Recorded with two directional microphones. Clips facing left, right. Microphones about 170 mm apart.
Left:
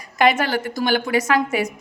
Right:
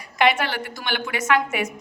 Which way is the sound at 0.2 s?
45° left (ahead or behind).